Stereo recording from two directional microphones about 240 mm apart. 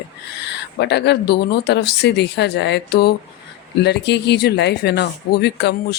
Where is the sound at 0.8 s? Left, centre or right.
Left.